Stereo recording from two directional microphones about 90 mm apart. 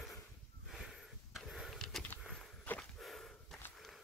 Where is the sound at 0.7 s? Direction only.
5° right (ahead or behind).